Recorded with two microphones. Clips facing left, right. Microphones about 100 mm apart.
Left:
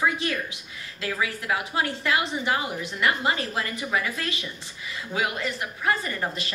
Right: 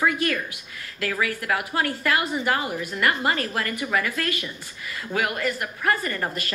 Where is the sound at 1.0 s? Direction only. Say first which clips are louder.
Right 2 dB; 20° left (ahead or behind).